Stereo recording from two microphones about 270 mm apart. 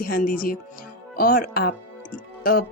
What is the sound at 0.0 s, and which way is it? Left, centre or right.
Speech, left.